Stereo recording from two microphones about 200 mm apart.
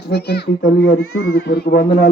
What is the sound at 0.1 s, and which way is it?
Speech, 55° left (ahead or behind).